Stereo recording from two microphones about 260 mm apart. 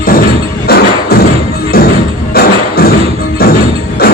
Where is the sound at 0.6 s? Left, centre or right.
Left.